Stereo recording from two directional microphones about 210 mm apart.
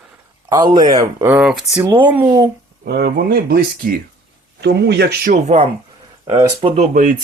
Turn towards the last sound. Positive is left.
turn(degrees=-40)  # may be behind; listen again after turning